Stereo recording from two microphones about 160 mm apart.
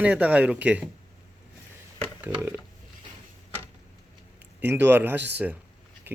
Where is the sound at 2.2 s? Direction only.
15° right (ahead or behind).